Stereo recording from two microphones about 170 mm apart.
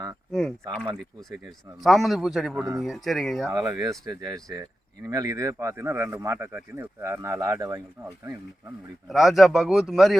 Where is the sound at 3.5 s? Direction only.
20° right (ahead or behind).